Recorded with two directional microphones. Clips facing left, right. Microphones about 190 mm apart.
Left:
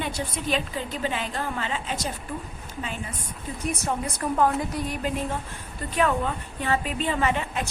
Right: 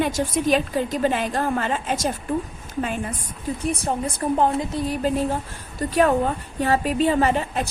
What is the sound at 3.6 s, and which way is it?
A woman's voice, 30° right (ahead or behind).